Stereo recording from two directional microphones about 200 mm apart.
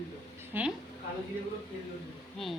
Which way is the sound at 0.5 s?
10° right (ahead or behind).